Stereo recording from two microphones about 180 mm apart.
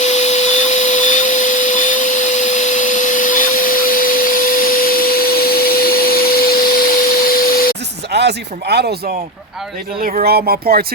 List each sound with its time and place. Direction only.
0.0 s vacuum cleaner: 40° left (ahead or behind); by 6.8 s 55° left (ahead or behind)
7.3 s a sound: 55° left (ahead or behind)
8.1 s speech: 70° right (ahead or behind)
10.0 s speech: 50° right (ahead or behind)